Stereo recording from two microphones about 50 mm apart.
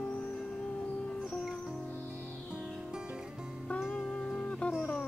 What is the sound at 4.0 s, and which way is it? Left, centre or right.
Music, centre.